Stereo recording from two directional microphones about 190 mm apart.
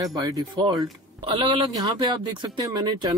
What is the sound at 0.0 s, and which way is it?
Speech, 20° right (ahead or behind).